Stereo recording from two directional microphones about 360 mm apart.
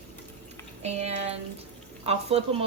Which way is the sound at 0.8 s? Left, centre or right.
Centre.